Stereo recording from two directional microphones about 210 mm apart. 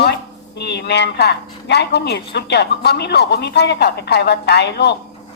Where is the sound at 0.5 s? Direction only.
55° left (ahead or behind).